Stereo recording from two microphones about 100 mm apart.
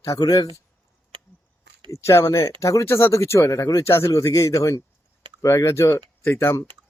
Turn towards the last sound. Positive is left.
turn(degrees=25)  # may be behind; listen again after turning